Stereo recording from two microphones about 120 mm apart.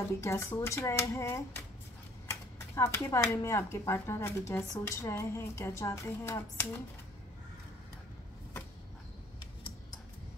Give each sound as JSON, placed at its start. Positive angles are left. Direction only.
{"t": 0.1, "sound": "speech", "side_deg": 25}
{"t": 2.7, "sound": "speech", "side_deg": 20}